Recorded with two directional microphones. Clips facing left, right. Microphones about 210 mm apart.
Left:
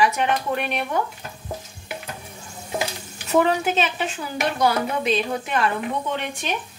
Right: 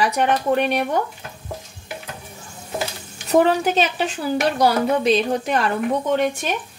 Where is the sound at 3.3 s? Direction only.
35° right (ahead or behind).